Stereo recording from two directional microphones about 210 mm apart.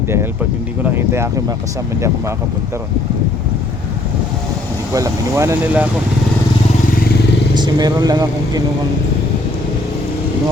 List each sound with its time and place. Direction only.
0.9 s speech: 10° right (ahead or behind)
4.9 s speech: 15° right (ahead or behind)
7.5 s speech: 20° right (ahead or behind)